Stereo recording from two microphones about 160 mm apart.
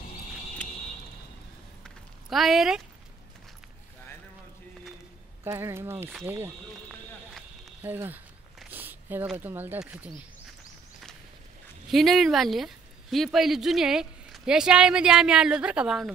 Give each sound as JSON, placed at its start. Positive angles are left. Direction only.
{"t": 1.8, "sound": "a sound", "side_deg": 0}
{"t": 5.4, "sound": "speech", "side_deg": -15}
{"t": 7.8, "sound": "speech", "side_deg": -10}
{"t": 8.5, "sound": "a sound", "side_deg": -10}
{"t": 9.4, "sound": "speech", "side_deg": -10}
{"t": 11.9, "sound": "speech", "side_deg": 0}